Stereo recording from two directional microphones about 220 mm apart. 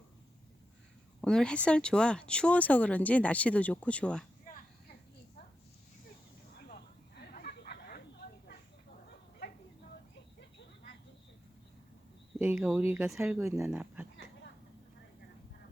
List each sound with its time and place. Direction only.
1.2 s speech: 5° left (ahead or behind)
7.3 s a sound: 45° left (ahead or behind)
12.4 s speech: 5° right (ahead or behind)